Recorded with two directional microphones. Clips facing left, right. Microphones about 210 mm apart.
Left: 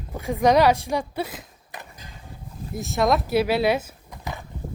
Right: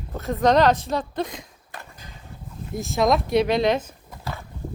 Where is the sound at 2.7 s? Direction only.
Centre (ahead or behind).